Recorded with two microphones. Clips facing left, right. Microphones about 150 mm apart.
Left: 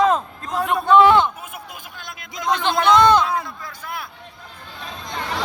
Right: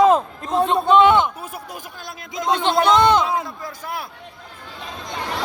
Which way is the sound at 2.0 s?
35° right (ahead or behind).